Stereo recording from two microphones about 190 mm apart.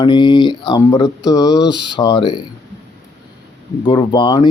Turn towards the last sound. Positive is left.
turn(degrees=25)  # may be behind; listen again after turning